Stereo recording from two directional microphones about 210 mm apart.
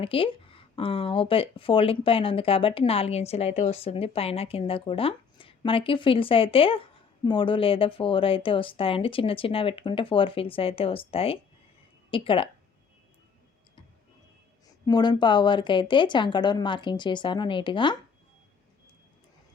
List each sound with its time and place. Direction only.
0.0 s speech: 25° left (ahead or behind)
14.8 s speech: 20° left (ahead or behind)